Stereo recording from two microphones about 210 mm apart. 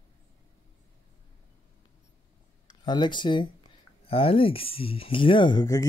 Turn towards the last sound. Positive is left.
turn(degrees=20)  # may be behind; listen again after turning